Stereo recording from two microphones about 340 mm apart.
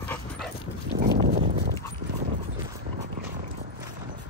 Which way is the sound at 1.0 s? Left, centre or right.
Right.